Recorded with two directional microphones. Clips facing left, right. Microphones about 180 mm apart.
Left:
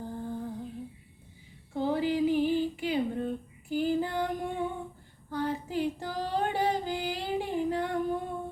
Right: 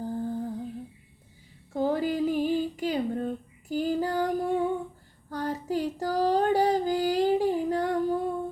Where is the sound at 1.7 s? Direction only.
45° right (ahead or behind).